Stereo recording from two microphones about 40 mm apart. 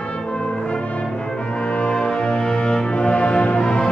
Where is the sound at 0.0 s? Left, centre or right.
Left.